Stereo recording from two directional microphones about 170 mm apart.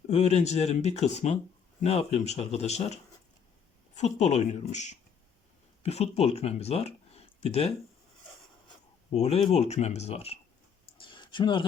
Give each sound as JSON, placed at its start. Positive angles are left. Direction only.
{"t": 0.1, "sound": "speech", "side_deg": 40}
{"t": 9.1, "sound": "speech", "side_deg": 35}
{"t": 10.9, "sound": "a sound", "side_deg": 30}